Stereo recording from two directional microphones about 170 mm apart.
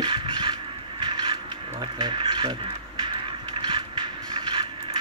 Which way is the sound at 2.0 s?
30° right (ahead or behind).